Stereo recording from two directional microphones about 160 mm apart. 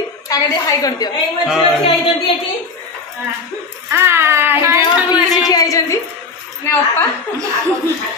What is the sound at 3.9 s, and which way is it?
Speech, 15° right (ahead or behind).